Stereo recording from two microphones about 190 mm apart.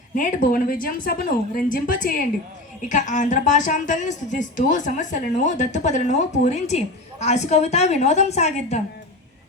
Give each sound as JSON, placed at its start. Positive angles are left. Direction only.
{"t": 0.1, "sound": "a woman's voice", "side_deg": 45}